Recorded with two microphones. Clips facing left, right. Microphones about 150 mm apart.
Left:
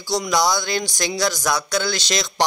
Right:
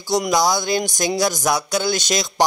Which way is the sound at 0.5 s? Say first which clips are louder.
Right 2 dB; 15° right (ahead or behind).